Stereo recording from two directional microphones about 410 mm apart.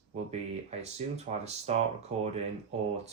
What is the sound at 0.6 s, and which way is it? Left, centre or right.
Speech, centre.